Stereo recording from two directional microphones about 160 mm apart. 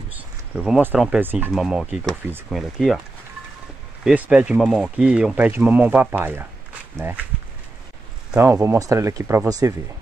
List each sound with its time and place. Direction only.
0.6 s speech: 5° right (ahead or behind)
4.0 s speech: 5° right (ahead or behind)
8.4 s speech: 15° right (ahead or behind)